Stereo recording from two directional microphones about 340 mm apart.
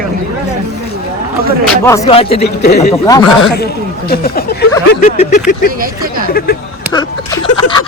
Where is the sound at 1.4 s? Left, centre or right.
Right.